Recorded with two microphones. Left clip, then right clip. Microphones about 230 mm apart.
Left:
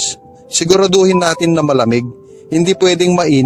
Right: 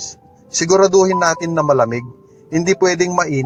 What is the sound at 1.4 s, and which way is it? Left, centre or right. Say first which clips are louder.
Speech: left 2 dB; left.